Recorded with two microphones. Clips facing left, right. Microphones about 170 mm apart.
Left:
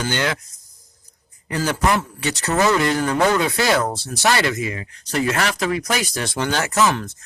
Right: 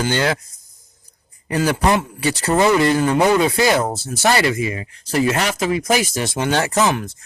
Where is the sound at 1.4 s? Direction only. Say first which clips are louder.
Right 3 dB; 25° right (ahead or behind).